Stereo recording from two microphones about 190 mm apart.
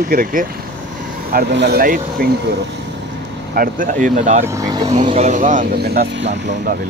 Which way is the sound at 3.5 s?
50° right (ahead or behind).